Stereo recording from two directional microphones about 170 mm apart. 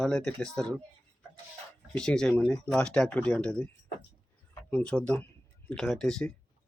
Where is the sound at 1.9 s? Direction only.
5° left (ahead or behind).